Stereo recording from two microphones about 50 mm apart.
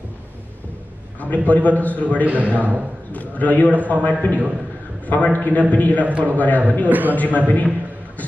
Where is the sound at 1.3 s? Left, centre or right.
Left.